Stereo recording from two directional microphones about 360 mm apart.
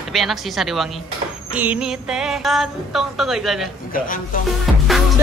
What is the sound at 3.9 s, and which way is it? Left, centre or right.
Speech, left.